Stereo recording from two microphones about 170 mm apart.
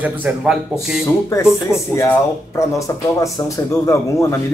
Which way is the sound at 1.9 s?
20° left (ahead or behind).